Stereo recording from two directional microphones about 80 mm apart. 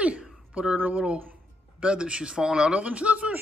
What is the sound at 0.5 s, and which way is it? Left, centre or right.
A man's voice, centre.